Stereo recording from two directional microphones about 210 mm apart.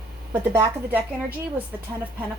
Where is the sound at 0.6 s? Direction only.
10° right (ahead or behind).